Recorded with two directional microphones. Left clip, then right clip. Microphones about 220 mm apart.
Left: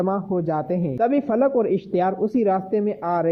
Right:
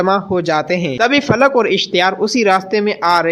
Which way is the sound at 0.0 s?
25° right (ahead or behind).